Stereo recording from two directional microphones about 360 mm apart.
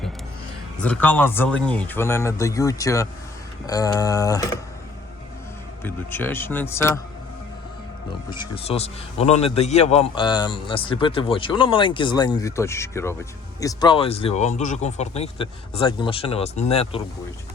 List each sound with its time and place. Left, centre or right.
0.8 s a man's voice: centre
5.8 s a man's voice: centre
8.3 s a man's voice: centre